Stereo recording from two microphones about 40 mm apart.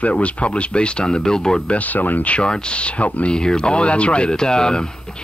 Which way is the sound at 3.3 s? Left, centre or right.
Centre.